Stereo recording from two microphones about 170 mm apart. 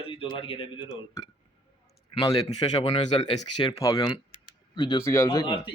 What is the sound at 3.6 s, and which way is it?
Speech, 20° left (ahead or behind).